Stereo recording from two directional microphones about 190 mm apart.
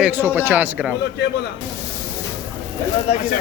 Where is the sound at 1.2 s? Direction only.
60° left (ahead or behind).